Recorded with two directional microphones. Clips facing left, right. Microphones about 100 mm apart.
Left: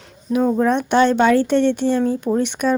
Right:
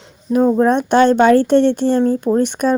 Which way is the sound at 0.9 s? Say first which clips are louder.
Right 4 dB; 45° right (ahead or behind).